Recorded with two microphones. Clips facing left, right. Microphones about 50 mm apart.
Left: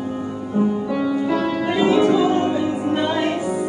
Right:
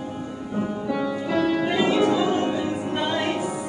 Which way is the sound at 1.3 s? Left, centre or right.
Centre.